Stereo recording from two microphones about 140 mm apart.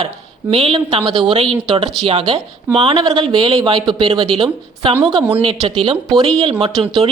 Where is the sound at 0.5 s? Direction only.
40° right (ahead or behind).